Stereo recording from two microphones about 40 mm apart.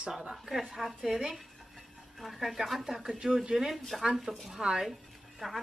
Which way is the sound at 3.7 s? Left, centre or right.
Centre.